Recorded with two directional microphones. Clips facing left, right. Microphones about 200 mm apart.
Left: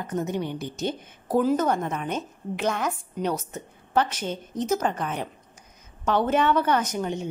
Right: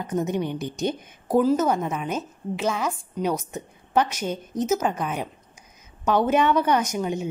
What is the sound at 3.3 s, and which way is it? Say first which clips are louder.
A woman's voice: right 3 dB; 15° right (ahead or behind).